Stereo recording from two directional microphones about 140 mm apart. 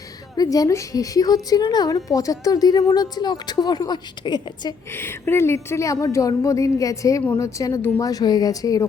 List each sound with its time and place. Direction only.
0.3 s a woman's voice: 25° left (ahead or behind)
4.9 s a woman's voice: 15° left (ahead or behind)